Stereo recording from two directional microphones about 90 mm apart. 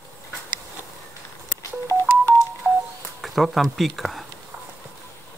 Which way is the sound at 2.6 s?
20° right (ahead or behind).